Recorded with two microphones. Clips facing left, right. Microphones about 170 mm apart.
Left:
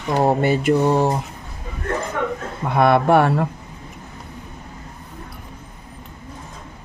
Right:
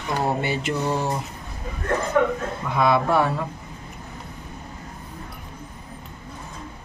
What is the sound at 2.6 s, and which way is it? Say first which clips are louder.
Speech: left 5 dB; 60° left (ahead or behind).